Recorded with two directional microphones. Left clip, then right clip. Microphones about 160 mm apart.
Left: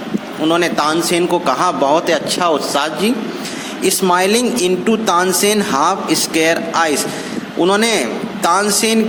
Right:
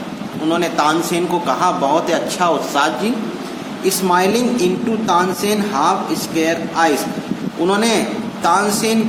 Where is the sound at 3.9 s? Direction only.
65° left (ahead or behind).